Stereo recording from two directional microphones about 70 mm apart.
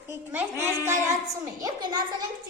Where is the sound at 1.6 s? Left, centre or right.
Right.